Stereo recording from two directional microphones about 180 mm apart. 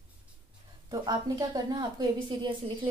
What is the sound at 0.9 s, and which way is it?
Speech, 20° right (ahead or behind).